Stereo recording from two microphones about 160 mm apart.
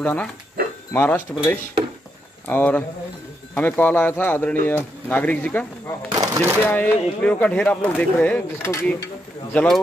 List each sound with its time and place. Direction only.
0.0 s speech: 10° left (ahead or behind)
0.6 s speech: 65° right (ahead or behind)
0.9 s speech: 10° left (ahead or behind)
2.4 s speech: 10° left (ahead or behind)
6.1 s a sound: 15° right (ahead or behind)
6.7 s speech: 10° left (ahead or behind)